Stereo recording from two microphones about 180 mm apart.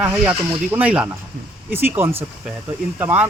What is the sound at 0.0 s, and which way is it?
Speech, 10° right (ahead or behind).